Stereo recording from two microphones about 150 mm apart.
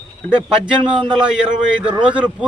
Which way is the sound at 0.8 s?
35° right (ahead or behind).